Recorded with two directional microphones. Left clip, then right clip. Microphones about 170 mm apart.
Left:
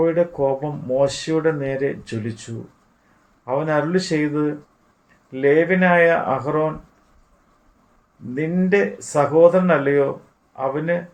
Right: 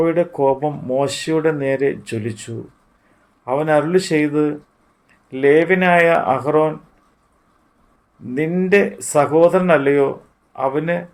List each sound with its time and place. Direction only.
0.0 s speech: 55° right (ahead or behind)
3.4 s speech: 55° right (ahead or behind)
8.4 s speech: 55° right (ahead or behind)